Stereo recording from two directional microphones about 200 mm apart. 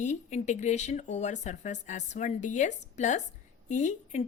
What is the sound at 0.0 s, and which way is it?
A woman's voice, 35° left (ahead or behind).